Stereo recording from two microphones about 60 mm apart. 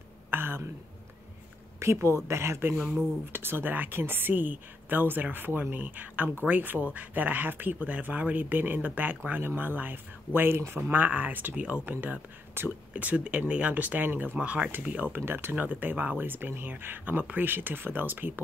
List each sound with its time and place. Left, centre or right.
0.3 s a sound: right
1.8 s speech: right
3.3 s speech: right
15.1 s speech: right